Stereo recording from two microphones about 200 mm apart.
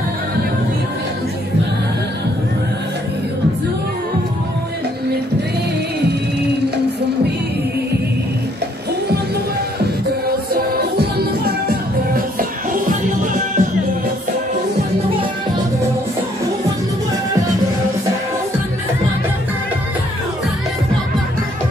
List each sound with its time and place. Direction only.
10.2 s music: 50° right (ahead or behind)